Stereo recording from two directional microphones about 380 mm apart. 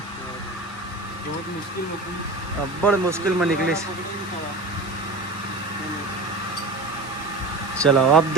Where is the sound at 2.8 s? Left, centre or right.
Centre.